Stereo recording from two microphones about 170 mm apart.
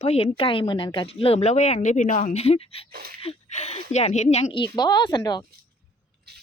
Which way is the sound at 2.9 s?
65° right (ahead or behind).